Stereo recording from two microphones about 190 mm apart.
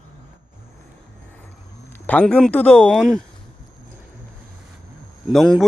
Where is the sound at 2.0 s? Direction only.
5° left (ahead or behind).